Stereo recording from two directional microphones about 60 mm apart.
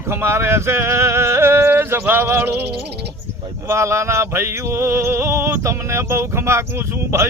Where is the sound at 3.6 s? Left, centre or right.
Right.